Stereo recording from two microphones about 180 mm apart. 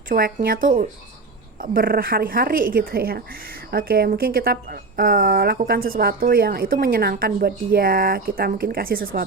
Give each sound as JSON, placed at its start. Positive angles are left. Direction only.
{"t": 0.1, "sound": "a woman's voice", "side_deg": -55}